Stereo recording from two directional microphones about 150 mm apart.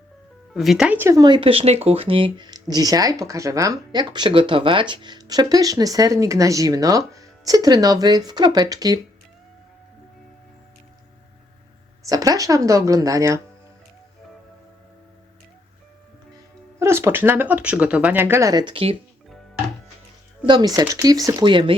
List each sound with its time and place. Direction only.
0.5 s speech: centre (ahead or behind)
1.2 s speech: 35° right (ahead or behind)
12.0 s speech: 25° right (ahead or behind)
16.8 s speech: 15° right (ahead or behind); by 18.9 s 35° right (ahead or behind)
20.5 s speech: 25° right (ahead or behind)